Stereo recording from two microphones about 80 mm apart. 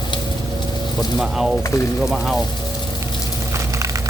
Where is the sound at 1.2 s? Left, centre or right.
Centre.